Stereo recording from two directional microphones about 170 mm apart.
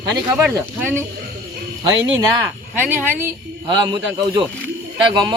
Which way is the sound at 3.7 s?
25° right (ahead or behind).